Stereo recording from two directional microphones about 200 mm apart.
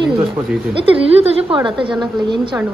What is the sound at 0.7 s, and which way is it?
A woman's voice, 25° right (ahead or behind).